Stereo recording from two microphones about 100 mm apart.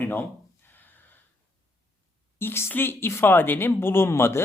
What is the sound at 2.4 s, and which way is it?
Speech, 25° left (ahead or behind).